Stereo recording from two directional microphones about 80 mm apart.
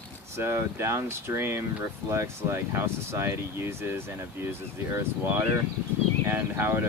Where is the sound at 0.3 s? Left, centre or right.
Right.